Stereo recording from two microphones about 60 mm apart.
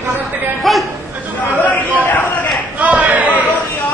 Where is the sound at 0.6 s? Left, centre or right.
Centre.